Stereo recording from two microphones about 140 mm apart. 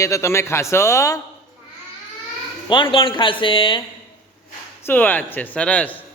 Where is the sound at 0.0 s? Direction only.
20° left (ahead or behind).